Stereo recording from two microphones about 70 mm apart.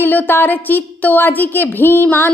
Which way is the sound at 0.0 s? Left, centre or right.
Left.